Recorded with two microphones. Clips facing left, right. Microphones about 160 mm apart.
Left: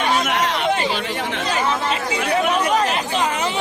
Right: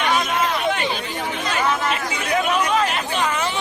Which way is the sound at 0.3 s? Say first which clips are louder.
Left 1 dB; 80° left.